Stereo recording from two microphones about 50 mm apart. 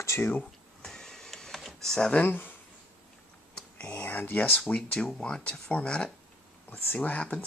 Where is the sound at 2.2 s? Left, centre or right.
Left.